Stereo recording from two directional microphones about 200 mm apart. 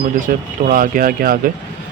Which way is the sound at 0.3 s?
40° right (ahead or behind).